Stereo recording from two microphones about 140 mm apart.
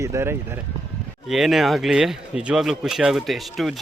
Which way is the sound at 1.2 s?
Centre (ahead or behind).